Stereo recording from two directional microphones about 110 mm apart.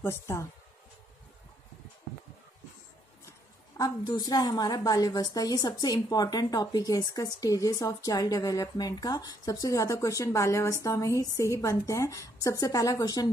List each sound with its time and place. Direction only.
0.0 s speech: 25° left (ahead or behind)
3.7 s a woman's voice: 35° left (ahead or behind)